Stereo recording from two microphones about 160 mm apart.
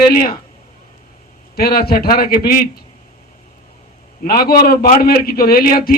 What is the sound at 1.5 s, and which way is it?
Speech, 75° left (ahead or behind).